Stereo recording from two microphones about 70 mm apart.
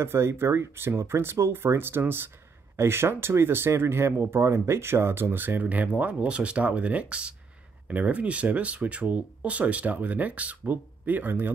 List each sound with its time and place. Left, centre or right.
0.0 s speech: right